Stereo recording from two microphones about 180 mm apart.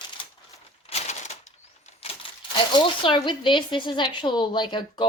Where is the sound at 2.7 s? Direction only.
30° left (ahead or behind).